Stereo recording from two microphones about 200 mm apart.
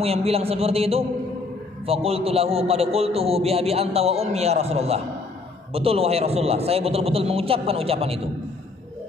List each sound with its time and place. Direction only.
0.0 s a man's voice: 30° right (ahead or behind)